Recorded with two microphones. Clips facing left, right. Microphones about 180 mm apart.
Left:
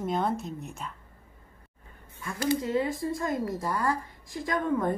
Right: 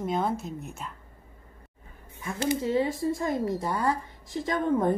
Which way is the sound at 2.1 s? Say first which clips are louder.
Even; 20° right (ahead or behind).